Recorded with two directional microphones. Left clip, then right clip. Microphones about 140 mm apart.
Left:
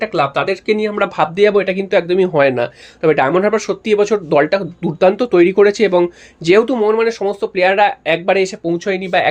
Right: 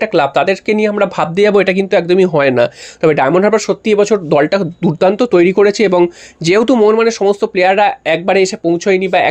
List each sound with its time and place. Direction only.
0.0 s speech: 50° right (ahead or behind)
1.9 s speech: 35° right (ahead or behind)
2.4 s speech: 50° right (ahead or behind)